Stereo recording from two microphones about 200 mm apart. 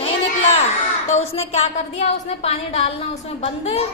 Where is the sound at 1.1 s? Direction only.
30° left (ahead or behind).